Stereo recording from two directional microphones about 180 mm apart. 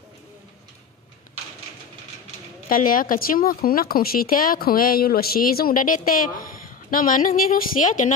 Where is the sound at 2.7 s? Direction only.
50° left (ahead or behind).